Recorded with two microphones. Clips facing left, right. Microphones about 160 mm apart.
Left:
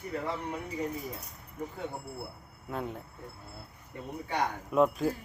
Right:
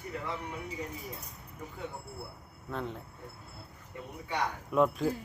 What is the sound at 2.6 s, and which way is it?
Speech, 10° left (ahead or behind).